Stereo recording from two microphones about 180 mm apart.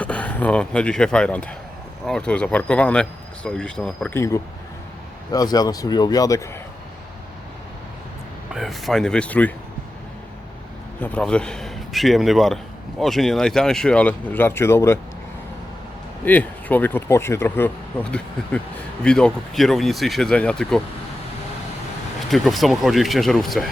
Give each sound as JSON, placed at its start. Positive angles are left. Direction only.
{"t": 0.0, "sound": "speech", "side_deg": 5}
{"t": 8.5, "sound": "speech", "side_deg": 0}
{"t": 11.0, "sound": "speech", "side_deg": 5}
{"t": 16.2, "sound": "speech", "side_deg": 10}
{"t": 22.3, "sound": "speech", "side_deg": 0}